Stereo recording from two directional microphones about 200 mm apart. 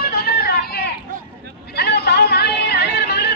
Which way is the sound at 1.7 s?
55° left (ahead or behind).